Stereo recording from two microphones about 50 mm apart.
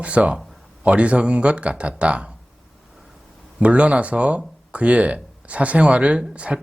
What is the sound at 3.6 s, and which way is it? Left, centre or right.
Speech, right.